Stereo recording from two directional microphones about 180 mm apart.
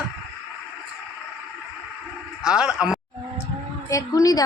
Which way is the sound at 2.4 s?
5° right (ahead or behind).